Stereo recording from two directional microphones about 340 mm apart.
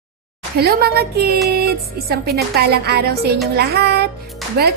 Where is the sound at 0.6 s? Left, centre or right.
Right.